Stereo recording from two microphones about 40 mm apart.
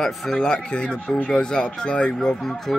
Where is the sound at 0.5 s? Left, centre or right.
Left.